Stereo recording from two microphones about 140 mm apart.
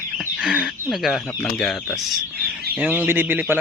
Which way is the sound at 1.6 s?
Centre (ahead or behind).